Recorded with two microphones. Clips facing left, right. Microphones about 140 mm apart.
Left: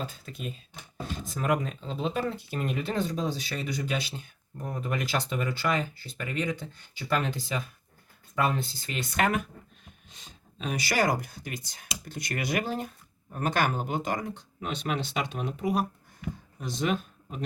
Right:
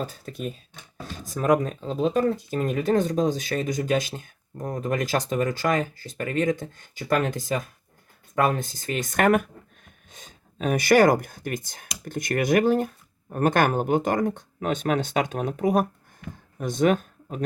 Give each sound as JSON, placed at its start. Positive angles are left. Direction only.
{"t": 0.0, "sound": "speech", "side_deg": -45}